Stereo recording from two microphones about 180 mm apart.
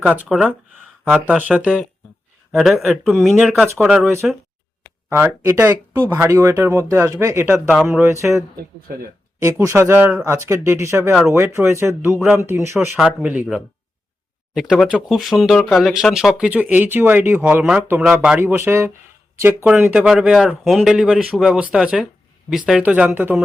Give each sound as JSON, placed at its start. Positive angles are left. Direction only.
{"t": 0.0, "sound": "speech", "side_deg": -5}
{"t": 5.0, "sound": "speech", "side_deg": -10}
{"t": 7.9, "sound": "speech", "side_deg": -15}
{"t": 9.4, "sound": "speech", "side_deg": -15}